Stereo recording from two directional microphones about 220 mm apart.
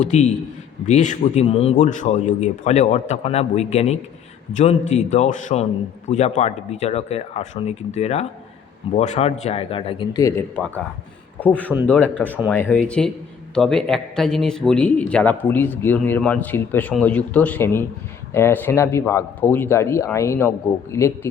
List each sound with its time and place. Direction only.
0.0 s a man's voice: 30° left (ahead or behind); by 21.1 s 10° left (ahead or behind)